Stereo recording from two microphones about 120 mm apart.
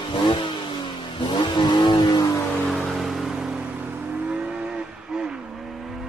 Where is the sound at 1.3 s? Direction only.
40° left (ahead or behind).